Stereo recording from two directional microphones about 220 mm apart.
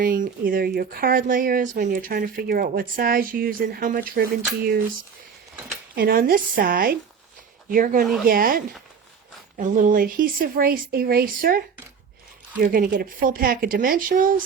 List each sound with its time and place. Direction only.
0.0 s speech: 40° right (ahead or behind)
6.0 s speech: 45° right (ahead or behind)
12.6 s speech: 40° right (ahead or behind)